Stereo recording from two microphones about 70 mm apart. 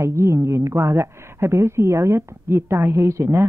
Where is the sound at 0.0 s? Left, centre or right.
Right.